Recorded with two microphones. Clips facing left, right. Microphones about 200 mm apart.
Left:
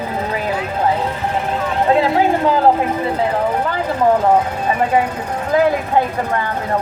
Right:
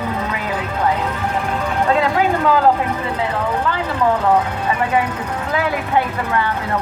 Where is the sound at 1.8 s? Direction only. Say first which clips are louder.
Left 3 dB; 30° left (ahead or behind).